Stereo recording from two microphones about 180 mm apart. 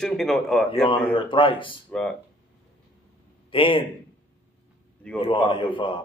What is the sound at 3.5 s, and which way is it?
Speech, 30° left (ahead or behind).